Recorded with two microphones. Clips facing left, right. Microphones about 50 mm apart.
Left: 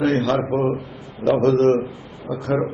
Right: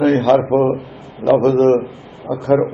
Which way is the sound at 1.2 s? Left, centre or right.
Centre.